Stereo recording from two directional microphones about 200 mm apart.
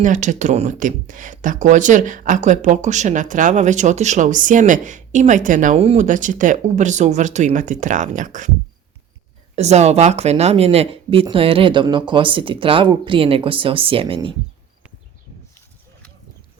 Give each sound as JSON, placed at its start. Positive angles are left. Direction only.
{"t": 0.0, "sound": "speech", "side_deg": -40}
{"t": 9.6, "sound": "speech", "side_deg": -35}